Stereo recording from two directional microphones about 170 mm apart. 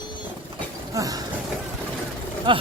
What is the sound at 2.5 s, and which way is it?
Speech, 30° right (ahead or behind).